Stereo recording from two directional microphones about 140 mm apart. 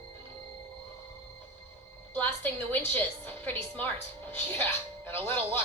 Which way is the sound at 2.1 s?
15° left (ahead or behind).